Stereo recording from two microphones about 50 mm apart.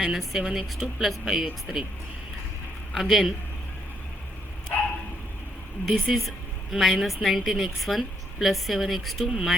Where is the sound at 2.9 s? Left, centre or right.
Centre.